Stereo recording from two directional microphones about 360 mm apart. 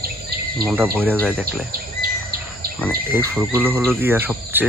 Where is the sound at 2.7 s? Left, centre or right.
Centre.